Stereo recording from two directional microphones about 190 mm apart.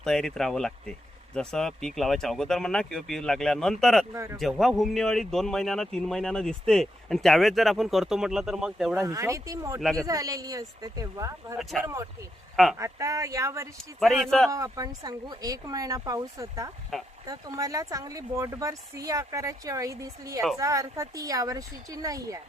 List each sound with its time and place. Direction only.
0.0 s speech: 5° left (ahead or behind)
4.1 s speech: 15° right (ahead or behind)
4.4 s speech: centre (ahead or behind); by 9.8 s 15° right (ahead or behind)
9.8 s speech: centre (ahead or behind)
10.1 s speech: 20° right (ahead or behind)
11.5 s speech: centre (ahead or behind)
12.7 s speech: 15° right (ahead or behind)
13.7 s speech: centre (ahead or behind)
14.5 s speech: 20° right (ahead or behind)